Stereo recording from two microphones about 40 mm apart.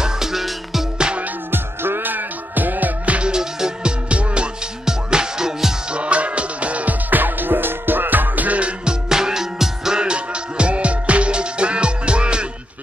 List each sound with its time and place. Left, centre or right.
0.0 s music: centre
1.5 s music: right
3.2 s music: centre
4.1 s music: right
4.8 s music: centre
5.9 s music: right
8.5 s music: right
9.1 s music: centre